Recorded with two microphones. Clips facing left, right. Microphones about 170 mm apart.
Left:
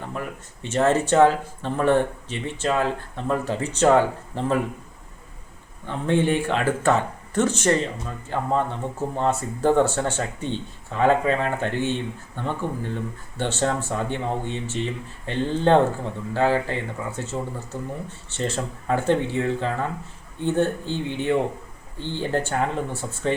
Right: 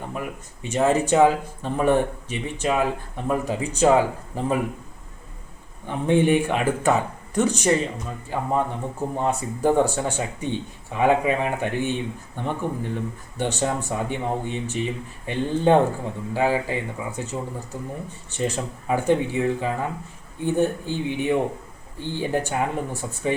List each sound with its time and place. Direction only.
0.1 s speech: 10° right (ahead or behind)
5.8 s speech: 15° right (ahead or behind)
18.3 s speech: 15° right (ahead or behind)